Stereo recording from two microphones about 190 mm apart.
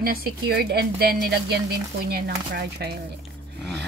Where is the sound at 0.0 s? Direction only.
50° right (ahead or behind).